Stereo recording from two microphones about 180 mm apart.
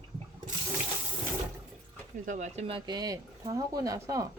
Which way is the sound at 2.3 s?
40° right (ahead or behind).